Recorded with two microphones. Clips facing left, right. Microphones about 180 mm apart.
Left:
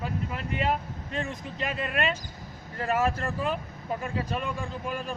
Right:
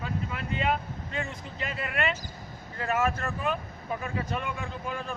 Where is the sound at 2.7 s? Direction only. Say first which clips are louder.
Left 1 dB; 35° left (ahead or behind).